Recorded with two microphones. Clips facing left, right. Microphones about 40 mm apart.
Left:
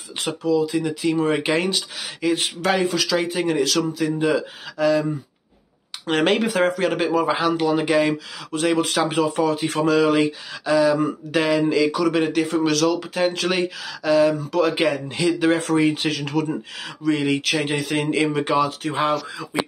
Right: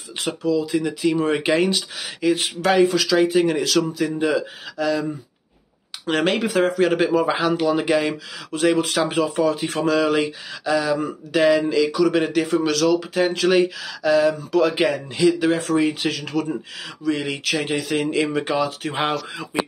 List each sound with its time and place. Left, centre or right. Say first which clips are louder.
0.2 s speech: left 1 dB; centre
6.0 s speech: left 1 dB; centre
18.9 s speech: left 2 dB; right